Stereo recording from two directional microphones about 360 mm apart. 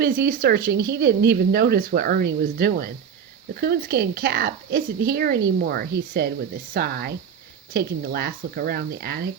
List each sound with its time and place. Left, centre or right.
0.0 s speech: right